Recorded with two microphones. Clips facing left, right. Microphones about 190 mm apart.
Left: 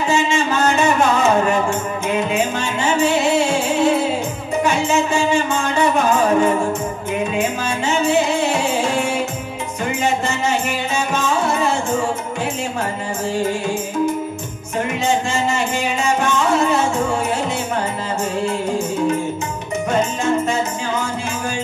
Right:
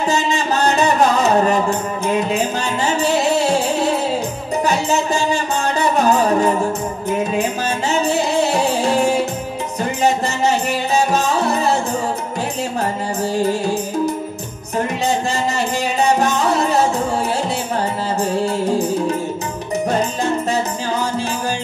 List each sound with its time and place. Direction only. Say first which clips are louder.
0.1 s music: left 2 dB; 35° right (ahead or behind)
4.6 s music: even; 40° right (ahead or behind)
7.9 s music: left 1 dB; 35° right (ahead or behind)
11.0 s music: right 3 dB; 35° right (ahead or behind)
13.4 s music: right 3 dB; 35° right (ahead or behind)
16.0 s music: right 3 dB; 35° right (ahead or behind)